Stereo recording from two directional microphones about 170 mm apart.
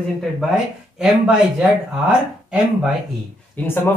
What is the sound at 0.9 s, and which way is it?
Speech, 5° right (ahead or behind).